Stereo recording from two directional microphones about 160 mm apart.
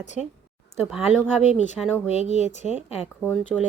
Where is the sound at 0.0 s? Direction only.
45° left (ahead or behind).